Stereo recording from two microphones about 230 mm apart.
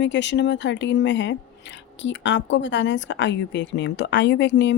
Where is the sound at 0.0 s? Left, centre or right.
Left.